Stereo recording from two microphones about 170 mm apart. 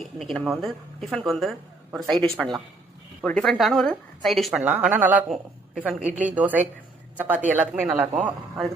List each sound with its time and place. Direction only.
0.2 s a woman's voice: centre (ahead or behind)
6.0 s a woman's voice: 45° right (ahead or behind)
6.2 s speech: 10° right (ahead or behind)